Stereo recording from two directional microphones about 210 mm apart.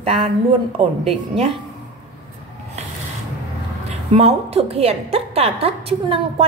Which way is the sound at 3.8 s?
30° right (ahead or behind).